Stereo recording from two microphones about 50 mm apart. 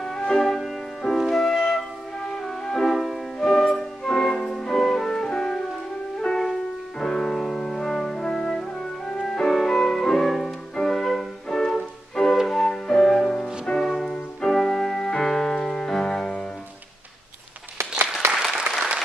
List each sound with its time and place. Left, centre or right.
0.0 s music: centre
13.8 s music: centre
18.7 s applause: centre